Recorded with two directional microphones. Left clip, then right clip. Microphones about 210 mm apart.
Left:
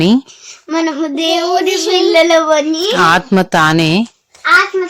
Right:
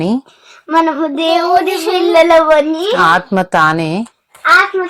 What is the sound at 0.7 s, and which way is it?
Speech, 20° left (ahead or behind).